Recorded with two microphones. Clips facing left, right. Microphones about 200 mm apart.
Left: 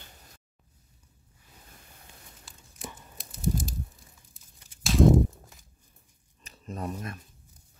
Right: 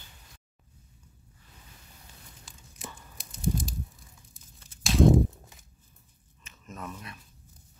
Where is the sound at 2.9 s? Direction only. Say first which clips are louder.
Left 1 dB; centre (ahead or behind).